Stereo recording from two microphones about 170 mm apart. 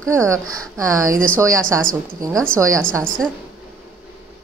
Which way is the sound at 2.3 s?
5° left (ahead or behind).